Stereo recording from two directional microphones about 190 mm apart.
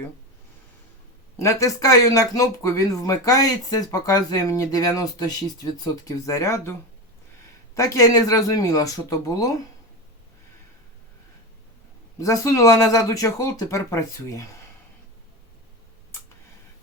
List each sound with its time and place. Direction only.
1.4 s speech: 15° left (ahead or behind)
7.8 s speech: 15° left (ahead or behind)
12.2 s speech: 15° left (ahead or behind)